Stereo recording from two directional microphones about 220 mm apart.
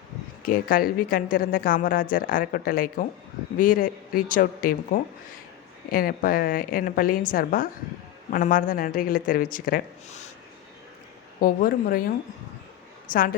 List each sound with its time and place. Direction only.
0.4 s speech: 40° left (ahead or behind)
11.3 s speech: 40° left (ahead or behind)